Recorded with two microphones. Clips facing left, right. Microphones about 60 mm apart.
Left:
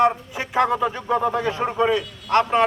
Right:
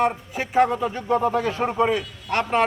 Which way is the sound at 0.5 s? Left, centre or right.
Left.